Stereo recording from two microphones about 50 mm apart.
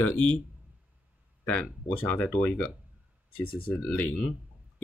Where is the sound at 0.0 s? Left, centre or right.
Left.